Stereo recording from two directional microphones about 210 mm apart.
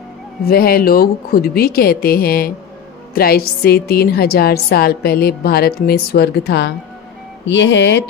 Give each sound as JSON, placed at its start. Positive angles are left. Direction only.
{"t": 0.5, "sound": "a woman's voice", "side_deg": 45}